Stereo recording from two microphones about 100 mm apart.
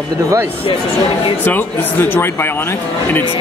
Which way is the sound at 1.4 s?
20° left (ahead or behind).